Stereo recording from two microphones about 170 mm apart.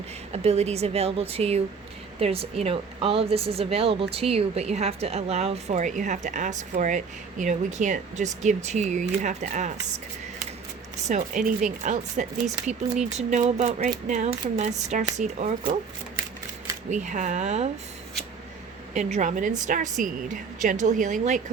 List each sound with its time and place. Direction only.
0.3 s a woman's voice: 40° right (ahead or behind)
11.1 s speech: 50° right (ahead or behind)
16.9 s speech: 45° right (ahead or behind)
18.9 s speech: 45° right (ahead or behind)